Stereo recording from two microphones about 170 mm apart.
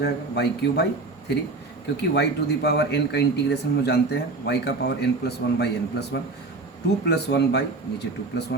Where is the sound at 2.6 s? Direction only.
75° left (ahead or behind).